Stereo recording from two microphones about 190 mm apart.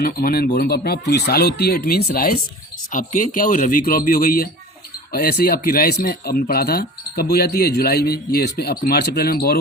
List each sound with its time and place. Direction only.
0.0 s speech: 50° left (ahead or behind)